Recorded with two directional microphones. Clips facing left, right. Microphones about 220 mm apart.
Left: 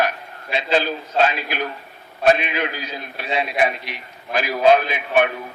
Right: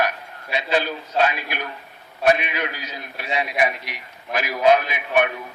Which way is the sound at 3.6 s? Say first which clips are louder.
Left 2 dB; 30° left (ahead or behind).